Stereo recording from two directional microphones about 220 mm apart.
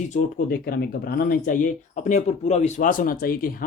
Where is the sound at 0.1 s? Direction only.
35° left (ahead or behind).